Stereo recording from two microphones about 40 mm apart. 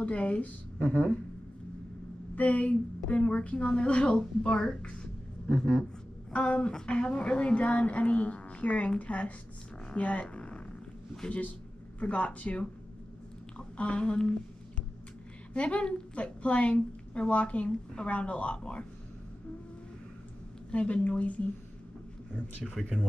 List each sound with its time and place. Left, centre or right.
0.0 s a woman's voice: left
2.3 s a woman's voice: left
10.2 s purr: left
11.2 s a woman's voice: left
13.7 s a woman's voice: left
15.5 s a woman's voice: left
20.7 s a woman's voice: left